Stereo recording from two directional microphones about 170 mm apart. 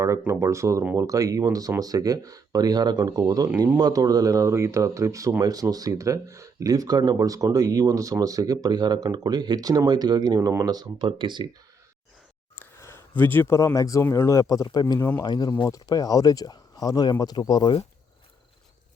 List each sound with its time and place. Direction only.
0.0 s speech: 15° right (ahead or behind)
12.5 s speech: 10° left (ahead or behind)